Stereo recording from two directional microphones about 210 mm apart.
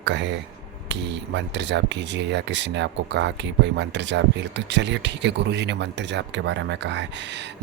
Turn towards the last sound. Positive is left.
turn(degrees=-55)  # may be behind; listen again after turning